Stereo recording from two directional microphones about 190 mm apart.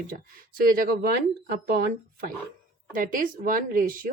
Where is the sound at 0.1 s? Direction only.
50° right (ahead or behind).